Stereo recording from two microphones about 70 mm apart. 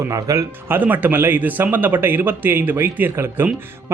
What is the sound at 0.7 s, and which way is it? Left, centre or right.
Speech, right.